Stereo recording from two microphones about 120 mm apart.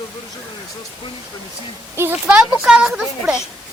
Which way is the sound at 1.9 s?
20° right (ahead or behind).